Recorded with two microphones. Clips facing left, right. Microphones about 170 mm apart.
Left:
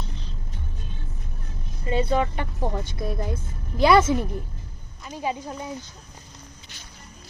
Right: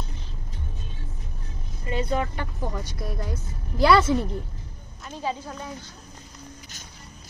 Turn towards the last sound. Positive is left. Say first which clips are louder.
# left 2 dB
turn(degrees=15)  # may be behind; listen again after turning